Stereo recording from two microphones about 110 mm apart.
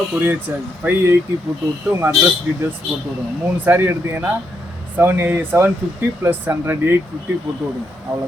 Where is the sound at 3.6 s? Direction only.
20° right (ahead or behind).